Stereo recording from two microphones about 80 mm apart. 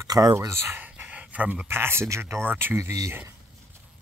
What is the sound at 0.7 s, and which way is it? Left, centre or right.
Speech, centre.